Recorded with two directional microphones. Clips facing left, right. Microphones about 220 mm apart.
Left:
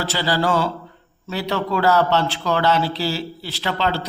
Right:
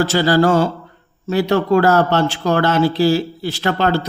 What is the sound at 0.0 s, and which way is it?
A man's voice, 45° right (ahead or behind).